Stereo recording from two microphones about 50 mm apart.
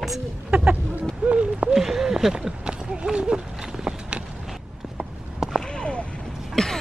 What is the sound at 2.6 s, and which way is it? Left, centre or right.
Run, centre.